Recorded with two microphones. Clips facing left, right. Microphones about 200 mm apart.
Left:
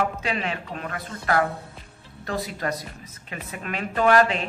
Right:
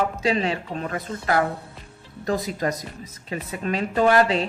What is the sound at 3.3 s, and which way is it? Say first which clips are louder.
Speech: right 6 dB; 30° right (ahead or behind).